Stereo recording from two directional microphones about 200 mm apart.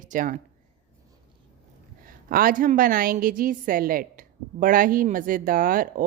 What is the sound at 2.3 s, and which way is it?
A woman's voice, 45° right (ahead or behind).